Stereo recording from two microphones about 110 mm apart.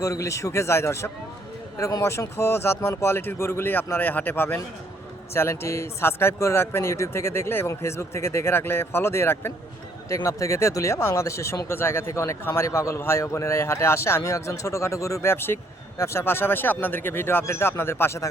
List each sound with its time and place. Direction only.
0.0 s speech: 30° left (ahead or behind)